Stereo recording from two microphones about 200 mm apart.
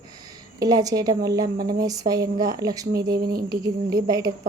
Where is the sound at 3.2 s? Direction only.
50° right (ahead or behind).